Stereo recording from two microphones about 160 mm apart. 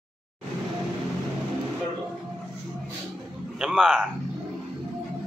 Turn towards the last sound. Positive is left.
turn(degrees=0)  # may be behind; listen again after turning